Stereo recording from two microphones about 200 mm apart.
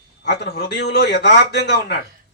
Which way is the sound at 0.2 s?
55° left (ahead or behind).